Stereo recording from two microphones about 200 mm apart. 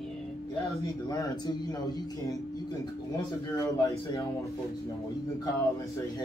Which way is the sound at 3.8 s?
15° left (ahead or behind).